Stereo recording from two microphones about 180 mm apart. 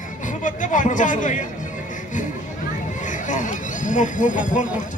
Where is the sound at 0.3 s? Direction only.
45° left (ahead or behind).